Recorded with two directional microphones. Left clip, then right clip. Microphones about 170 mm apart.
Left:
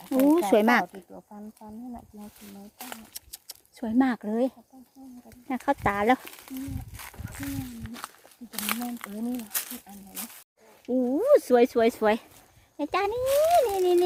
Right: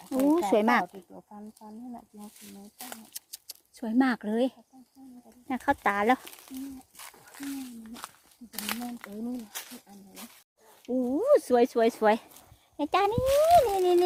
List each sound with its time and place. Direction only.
0.1 s speech: 10° left (ahead or behind); by 4.5 s 5° right (ahead or behind)
5.6 s speech: centre (ahead or behind)
6.2 s speech: 15° left (ahead or behind)
8.5 s speech: 25° left (ahead or behind)
10.1 s speech: 55° left (ahead or behind)
11.0 s speech: 10° right (ahead or behind)
12.7 s speech: 35° right (ahead or behind)
13.2 s speech: 20° right (ahead or behind)
13.6 s speech: 30° right (ahead or behind)